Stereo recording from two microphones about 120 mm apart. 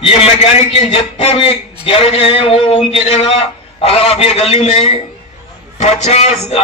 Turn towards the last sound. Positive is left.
turn(degrees=60)  # may be behind; listen again after turning